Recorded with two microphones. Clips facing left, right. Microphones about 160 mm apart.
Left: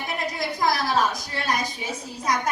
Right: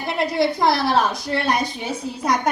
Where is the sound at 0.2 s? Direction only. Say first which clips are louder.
Right 9 dB; 65° right (ahead or behind).